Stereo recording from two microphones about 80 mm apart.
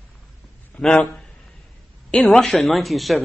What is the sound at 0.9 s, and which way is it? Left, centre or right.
Speech, centre.